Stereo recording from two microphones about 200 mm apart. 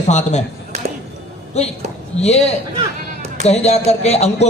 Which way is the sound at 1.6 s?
30° left (ahead or behind).